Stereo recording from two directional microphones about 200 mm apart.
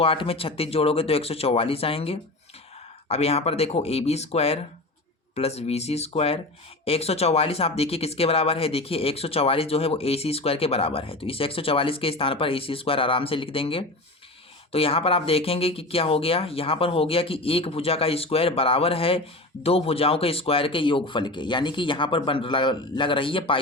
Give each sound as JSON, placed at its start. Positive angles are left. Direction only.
{"t": 0.0, "sound": "speech", "side_deg": 30}